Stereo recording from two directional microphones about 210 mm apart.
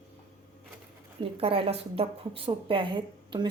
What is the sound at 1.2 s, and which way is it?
A woman's voice, 25° right (ahead or behind).